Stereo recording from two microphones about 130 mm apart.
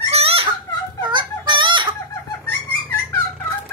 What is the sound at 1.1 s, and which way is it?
Chicken, 40° right (ahead or behind).